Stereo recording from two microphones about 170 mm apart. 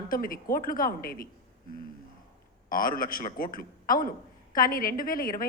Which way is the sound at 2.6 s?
55° left (ahead or behind).